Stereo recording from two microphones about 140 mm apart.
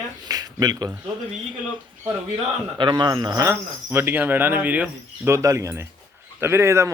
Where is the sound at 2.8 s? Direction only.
35° right (ahead or behind).